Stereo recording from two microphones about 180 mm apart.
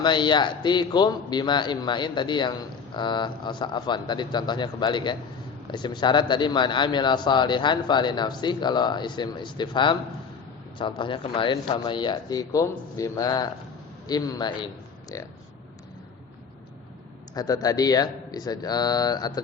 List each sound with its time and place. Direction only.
0.0 s a man's voice: 25° left (ahead or behind)
17.3 s a man's voice: 20° left (ahead or behind)